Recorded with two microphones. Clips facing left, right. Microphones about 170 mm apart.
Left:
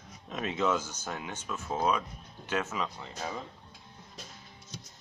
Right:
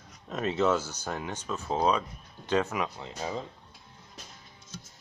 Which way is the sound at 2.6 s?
15° right (ahead or behind).